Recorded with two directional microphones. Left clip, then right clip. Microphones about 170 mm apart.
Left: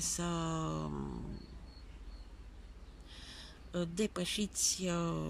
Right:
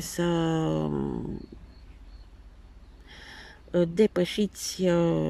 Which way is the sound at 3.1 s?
50° right (ahead or behind).